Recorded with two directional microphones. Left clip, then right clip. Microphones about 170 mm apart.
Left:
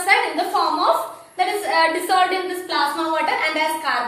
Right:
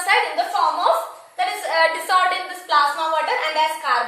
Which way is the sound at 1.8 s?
30° right (ahead or behind).